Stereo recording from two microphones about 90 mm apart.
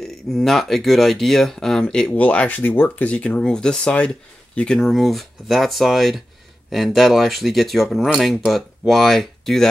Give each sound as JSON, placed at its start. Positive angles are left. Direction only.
{"t": 0.0, "sound": "speech", "side_deg": 5}